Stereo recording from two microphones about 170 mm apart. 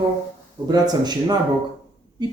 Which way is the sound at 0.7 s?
25° right (ahead or behind).